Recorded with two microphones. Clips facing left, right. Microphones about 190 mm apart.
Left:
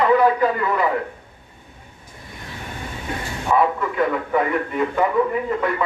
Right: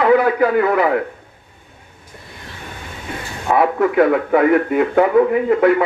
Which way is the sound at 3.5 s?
75° right (ahead or behind).